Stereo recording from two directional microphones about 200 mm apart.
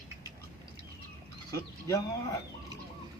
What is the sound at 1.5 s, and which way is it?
Speech, 15° left (ahead or behind).